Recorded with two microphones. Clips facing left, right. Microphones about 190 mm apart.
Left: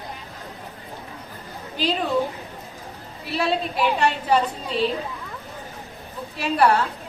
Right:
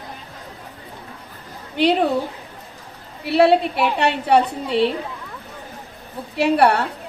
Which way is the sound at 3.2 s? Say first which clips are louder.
Right 9 dB; 65° right (ahead or behind).